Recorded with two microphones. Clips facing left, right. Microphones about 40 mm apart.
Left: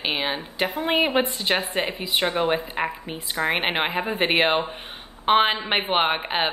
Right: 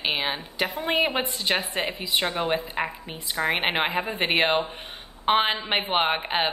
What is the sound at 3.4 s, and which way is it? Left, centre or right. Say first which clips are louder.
A woman's voice: left 1 dB; centre.